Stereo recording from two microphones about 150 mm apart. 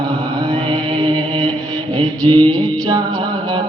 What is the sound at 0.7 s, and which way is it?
Music, 30° right (ahead or behind).